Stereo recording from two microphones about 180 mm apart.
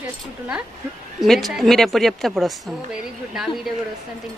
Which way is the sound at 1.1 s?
Centre (ahead or behind).